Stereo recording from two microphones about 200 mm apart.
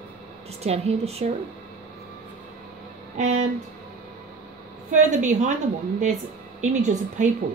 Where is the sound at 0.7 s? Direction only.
30° right (ahead or behind).